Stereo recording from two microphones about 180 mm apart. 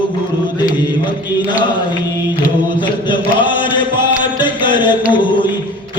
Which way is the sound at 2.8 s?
25° left (ahead or behind).